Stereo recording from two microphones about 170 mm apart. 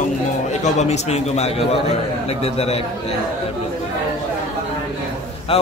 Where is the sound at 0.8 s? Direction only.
40° left (ahead or behind).